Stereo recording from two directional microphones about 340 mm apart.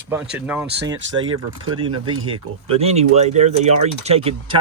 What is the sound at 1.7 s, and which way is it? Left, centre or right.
Speech, centre.